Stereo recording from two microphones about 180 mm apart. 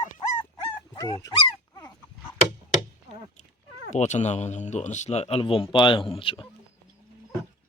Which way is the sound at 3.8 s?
40° left (ahead or behind).